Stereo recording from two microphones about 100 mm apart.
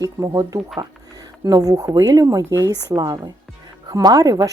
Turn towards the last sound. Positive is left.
turn(degrees=-40)  # may be behind; listen again after turning